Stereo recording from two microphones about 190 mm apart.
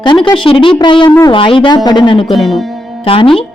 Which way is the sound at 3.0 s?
30° left (ahead or behind).